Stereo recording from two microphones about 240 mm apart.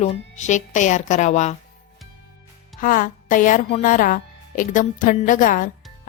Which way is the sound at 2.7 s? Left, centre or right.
Left.